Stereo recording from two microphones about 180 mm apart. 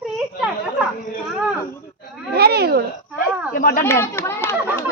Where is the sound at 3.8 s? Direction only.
15° left (ahead or behind).